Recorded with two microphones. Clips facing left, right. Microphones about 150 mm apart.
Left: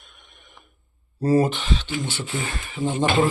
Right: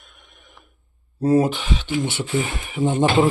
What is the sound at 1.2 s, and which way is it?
Speech, 5° right (ahead or behind).